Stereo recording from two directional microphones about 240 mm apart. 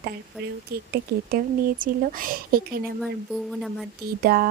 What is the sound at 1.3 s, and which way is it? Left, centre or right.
Speech, right.